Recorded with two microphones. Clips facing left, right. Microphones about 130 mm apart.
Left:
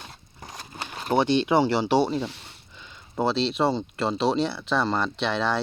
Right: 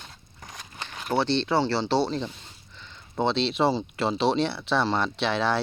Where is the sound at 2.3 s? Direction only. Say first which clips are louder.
Left 2 dB; 75° left (ahead or behind).